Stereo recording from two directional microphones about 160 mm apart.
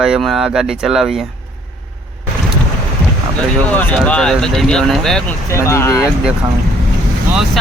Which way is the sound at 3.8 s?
5° left (ahead or behind).